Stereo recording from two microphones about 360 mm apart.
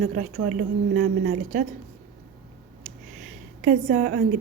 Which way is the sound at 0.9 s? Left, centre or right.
Right.